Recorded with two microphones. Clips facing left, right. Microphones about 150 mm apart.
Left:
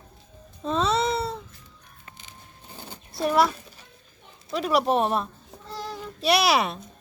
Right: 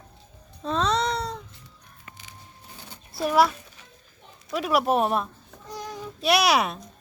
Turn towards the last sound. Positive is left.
turn(degrees=0)  # may be behind; listen again after turning